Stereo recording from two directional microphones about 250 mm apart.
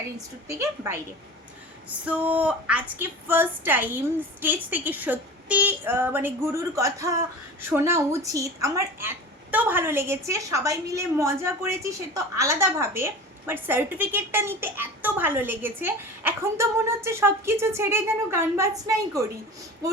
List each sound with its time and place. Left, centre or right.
0.4 s a woman's voice: centre